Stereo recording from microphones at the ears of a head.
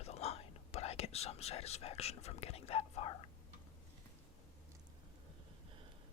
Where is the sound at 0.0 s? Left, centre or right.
Left.